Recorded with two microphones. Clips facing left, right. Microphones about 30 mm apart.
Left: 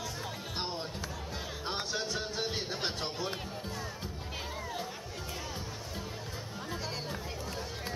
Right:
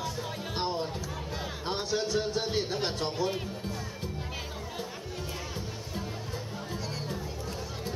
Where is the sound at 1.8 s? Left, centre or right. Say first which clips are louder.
Right 8 dB; centre.